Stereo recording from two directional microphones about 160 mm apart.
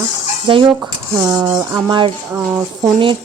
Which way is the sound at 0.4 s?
30° right (ahead or behind).